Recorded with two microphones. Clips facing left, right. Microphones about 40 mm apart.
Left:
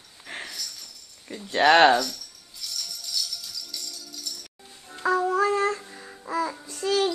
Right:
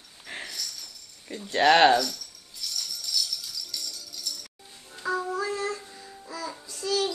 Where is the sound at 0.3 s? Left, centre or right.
Centre.